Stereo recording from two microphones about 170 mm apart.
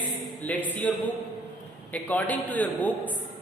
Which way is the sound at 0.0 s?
10° left (ahead or behind).